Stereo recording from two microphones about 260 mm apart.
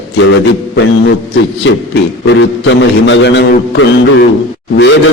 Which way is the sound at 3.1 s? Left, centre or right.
Left.